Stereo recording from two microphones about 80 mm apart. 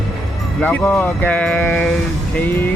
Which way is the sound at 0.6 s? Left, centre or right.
Left.